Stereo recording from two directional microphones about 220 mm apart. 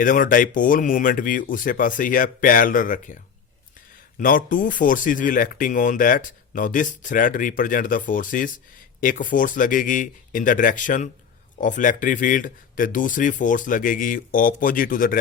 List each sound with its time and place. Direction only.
0.0 s speech: 40° left (ahead or behind)
4.2 s speech: 40° left (ahead or behind)